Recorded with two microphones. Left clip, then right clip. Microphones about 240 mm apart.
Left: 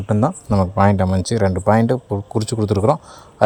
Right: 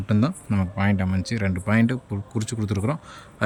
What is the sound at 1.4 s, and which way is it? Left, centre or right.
Speech, left.